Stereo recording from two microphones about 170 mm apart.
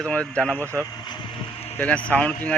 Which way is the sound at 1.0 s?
25° left (ahead or behind).